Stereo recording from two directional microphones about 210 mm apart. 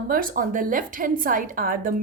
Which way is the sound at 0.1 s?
40° right (ahead or behind).